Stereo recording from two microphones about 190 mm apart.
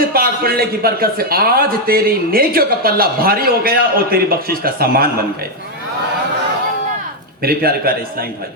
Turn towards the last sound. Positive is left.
turn(degrees=-50)  # may be behind; listen again after turning